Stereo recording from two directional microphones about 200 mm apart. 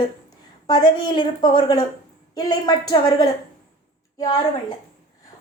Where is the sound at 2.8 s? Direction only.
20° left (ahead or behind).